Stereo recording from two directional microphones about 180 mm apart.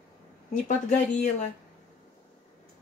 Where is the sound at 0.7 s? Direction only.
40° left (ahead or behind).